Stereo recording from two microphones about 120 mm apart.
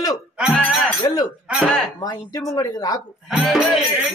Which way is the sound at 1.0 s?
30° left (ahead or behind).